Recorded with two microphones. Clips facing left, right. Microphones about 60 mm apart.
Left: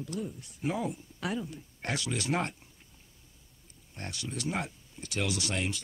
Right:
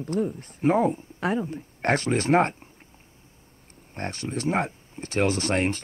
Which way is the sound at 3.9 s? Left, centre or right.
Right.